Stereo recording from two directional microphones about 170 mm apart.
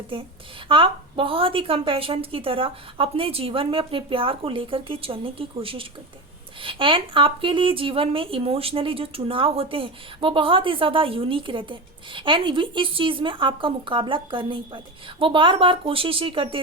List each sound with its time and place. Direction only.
0.1 s speech: 30° right (ahead or behind)